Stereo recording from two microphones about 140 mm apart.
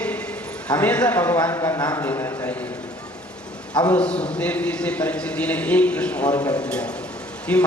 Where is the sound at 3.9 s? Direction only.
10° left (ahead or behind).